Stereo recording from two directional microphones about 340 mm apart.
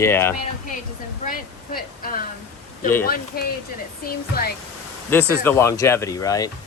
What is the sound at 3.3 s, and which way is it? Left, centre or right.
Speech, left.